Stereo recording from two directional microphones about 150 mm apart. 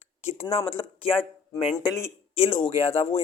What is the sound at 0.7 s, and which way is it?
Speech, 35° left (ahead or behind).